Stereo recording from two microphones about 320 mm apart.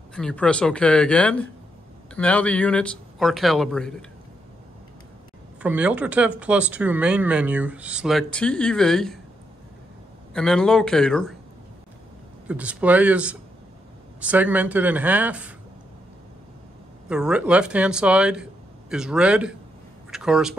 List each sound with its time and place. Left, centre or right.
0.1 s speech: centre
5.6 s speech: centre
10.3 s speech: centre
12.4 s speech: centre
17.1 s speech: centre